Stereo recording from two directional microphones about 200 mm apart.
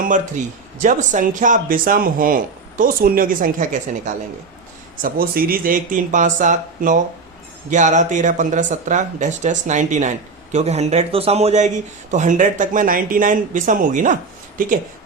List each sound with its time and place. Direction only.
0.0 s speech: 40° right (ahead or behind)